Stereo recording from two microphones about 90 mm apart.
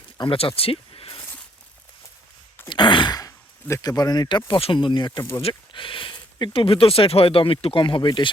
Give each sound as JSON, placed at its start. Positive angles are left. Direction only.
{"t": 0.2, "sound": "speech", "side_deg": 80}
{"t": 2.6, "sound": "a sound", "side_deg": 65}
{"t": 3.2, "sound": "speech", "side_deg": 40}
{"t": 5.4, "sound": "speech", "side_deg": 80}